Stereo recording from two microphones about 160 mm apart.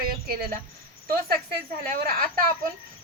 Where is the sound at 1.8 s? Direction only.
65° right (ahead or behind).